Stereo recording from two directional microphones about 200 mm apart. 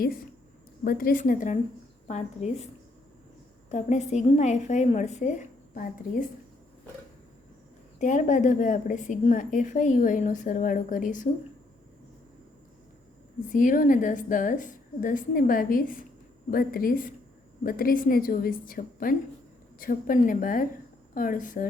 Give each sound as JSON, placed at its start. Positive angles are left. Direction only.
{"t": 0.9, "sound": "a woman's voice", "side_deg": 45}
{"t": 3.7, "sound": "a woman's voice", "side_deg": 35}
{"t": 7.9, "sound": "a woman's voice", "side_deg": 40}
{"t": 13.5, "sound": "a woman's voice", "side_deg": 40}